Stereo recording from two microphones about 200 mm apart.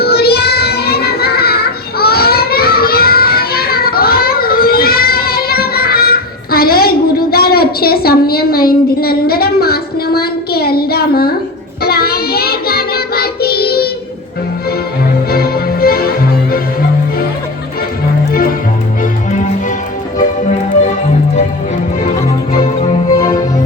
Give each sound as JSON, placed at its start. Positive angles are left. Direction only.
{"t": 0.0, "sound": "music", "side_deg": 50}
{"t": 11.8, "sound": "child singing", "side_deg": 50}
{"t": 15.3, "sound": "music", "side_deg": 50}
{"t": 20.1, "sound": "music", "side_deg": 40}
{"t": 22.6, "sound": "music", "side_deg": 30}